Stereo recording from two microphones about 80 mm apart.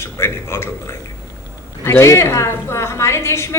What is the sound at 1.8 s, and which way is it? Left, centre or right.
A man's voice, left.